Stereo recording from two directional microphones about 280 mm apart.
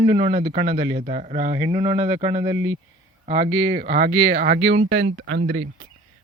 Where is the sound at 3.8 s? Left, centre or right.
Right.